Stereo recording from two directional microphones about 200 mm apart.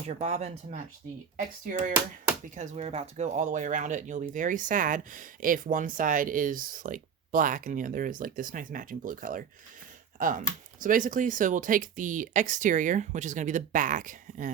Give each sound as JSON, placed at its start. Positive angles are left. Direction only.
{"t": 0.1, "sound": "speech", "side_deg": -35}
{"t": 2.6, "sound": "speech", "side_deg": -35}